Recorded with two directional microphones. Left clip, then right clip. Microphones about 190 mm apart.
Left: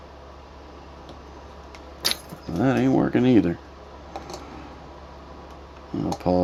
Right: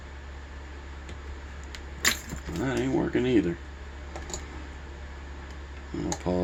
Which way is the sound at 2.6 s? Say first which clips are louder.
Left 7 dB; 55° left (ahead or behind).